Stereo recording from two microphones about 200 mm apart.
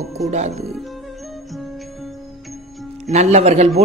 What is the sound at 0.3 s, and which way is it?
Speech, 35° right (ahead or behind).